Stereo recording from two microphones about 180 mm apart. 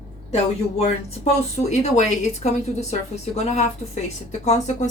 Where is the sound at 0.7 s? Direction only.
35° left (ahead or behind).